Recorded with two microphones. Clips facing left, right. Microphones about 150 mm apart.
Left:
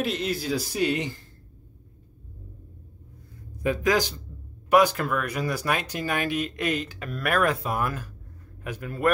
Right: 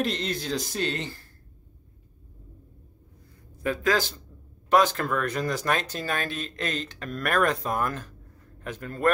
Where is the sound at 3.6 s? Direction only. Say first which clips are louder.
Left 2 dB; 15° left (ahead or behind).